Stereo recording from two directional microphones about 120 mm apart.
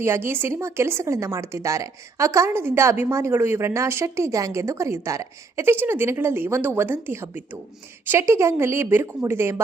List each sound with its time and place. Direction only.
0.0 s speech: 20° right (ahead or behind)